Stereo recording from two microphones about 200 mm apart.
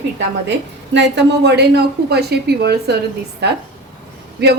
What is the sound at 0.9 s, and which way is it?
A woman's voice, 60° right (ahead or behind).